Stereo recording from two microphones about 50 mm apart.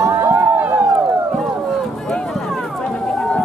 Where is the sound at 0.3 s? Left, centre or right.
Right.